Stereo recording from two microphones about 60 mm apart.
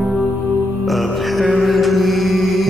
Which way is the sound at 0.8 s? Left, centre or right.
Centre.